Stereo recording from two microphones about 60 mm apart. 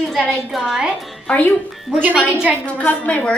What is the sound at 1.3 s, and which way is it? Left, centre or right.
Speech, left.